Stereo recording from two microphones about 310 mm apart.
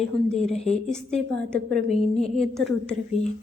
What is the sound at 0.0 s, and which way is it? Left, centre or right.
A woman's voice, centre.